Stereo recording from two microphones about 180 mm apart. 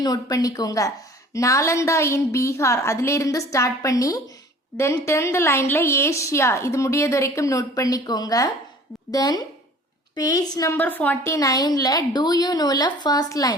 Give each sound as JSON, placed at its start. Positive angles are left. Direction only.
{"t": 0.0, "sound": "a woman's voice", "side_deg": 20}